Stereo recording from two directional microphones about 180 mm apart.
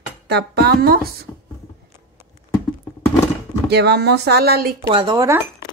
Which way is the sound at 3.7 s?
65° right (ahead or behind).